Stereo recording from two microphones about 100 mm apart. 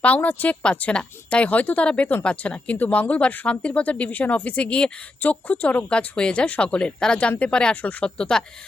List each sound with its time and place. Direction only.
0.0 s a woman's voice: 15° left (ahead or behind)